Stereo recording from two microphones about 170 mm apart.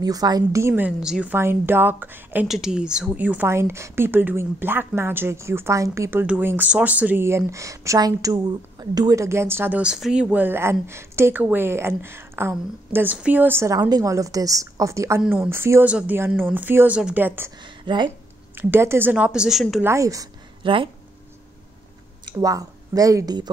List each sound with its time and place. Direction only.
0.0 s a woman's voice: 20° right (ahead or behind)
17.8 s speech: 25° right (ahead or behind)
18.5 s a woman's voice: 10° right (ahead or behind)
19.8 s speech: 15° right (ahead or behind)
20.6 s speech: 30° right (ahead or behind)
22.2 s speech: 20° right (ahead or behind)